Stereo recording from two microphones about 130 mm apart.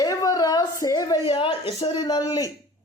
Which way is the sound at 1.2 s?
40° left (ahead or behind).